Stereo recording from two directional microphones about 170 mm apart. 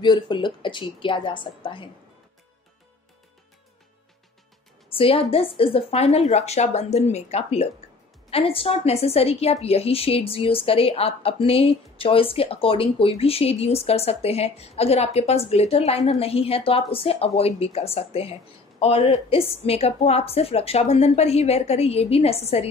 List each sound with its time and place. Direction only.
0.0 s a woman's voice: 25° left (ahead or behind)
4.8 s a woman's voice: 35° left (ahead or behind)